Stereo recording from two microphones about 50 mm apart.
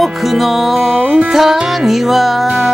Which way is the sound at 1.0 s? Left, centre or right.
Centre.